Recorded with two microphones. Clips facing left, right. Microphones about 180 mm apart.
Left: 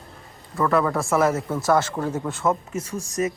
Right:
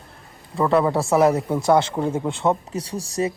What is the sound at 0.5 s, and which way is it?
Speech, 20° right (ahead or behind).